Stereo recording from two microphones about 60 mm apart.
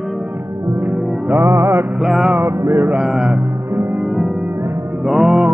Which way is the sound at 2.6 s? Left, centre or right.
Right.